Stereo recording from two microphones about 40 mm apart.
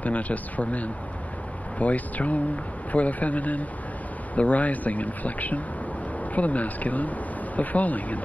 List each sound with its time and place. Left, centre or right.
0.0 s speech: left